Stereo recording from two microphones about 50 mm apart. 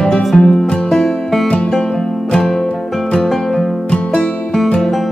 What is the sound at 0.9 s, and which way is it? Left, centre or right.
Music, centre.